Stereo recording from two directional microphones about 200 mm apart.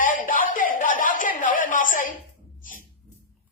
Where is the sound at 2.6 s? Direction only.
40° left (ahead or behind).